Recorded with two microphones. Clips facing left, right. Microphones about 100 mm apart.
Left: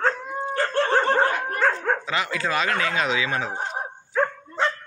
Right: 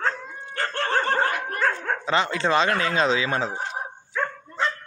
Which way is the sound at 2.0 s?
30° right (ahead or behind).